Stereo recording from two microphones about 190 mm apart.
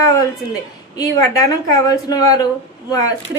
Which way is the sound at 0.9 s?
20° left (ahead or behind).